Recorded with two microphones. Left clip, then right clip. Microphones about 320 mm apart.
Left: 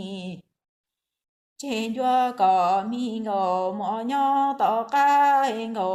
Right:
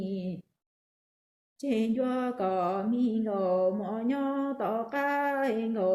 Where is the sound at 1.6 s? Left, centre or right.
Left.